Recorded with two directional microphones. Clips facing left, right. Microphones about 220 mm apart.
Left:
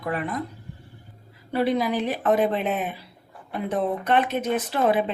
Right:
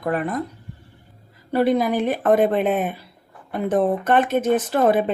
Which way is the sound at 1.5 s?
45° right (ahead or behind).